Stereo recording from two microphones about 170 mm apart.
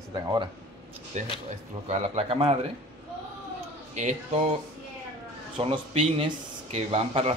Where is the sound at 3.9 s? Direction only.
40° right (ahead or behind).